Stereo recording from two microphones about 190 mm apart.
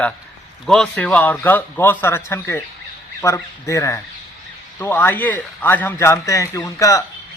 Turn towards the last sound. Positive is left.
turn(degrees=15)  # may be behind; listen again after turning